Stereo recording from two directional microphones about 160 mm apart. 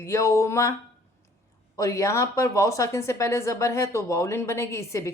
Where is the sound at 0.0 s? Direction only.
20° left (ahead or behind).